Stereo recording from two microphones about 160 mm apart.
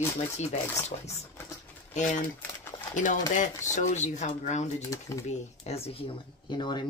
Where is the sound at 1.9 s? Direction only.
50° left (ahead or behind).